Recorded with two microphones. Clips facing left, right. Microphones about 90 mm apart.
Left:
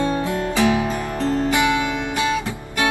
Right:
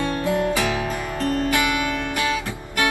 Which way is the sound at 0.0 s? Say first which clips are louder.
Even; 20° left (ahead or behind).